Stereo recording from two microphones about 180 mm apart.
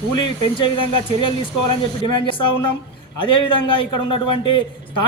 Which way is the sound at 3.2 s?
30° left (ahead or behind).